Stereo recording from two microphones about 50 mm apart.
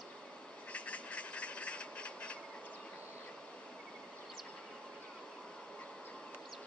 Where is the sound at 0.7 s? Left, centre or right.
Left.